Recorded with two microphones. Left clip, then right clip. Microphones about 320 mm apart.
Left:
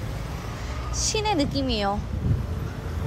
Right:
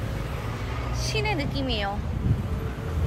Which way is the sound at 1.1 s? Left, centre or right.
Centre.